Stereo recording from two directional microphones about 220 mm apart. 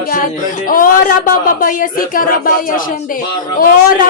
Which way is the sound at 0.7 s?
40° left (ahead or behind).